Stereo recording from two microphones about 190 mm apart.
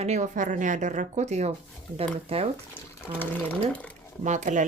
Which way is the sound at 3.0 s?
10° left (ahead or behind).